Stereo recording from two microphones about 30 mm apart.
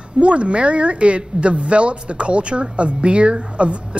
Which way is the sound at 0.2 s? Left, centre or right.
Right.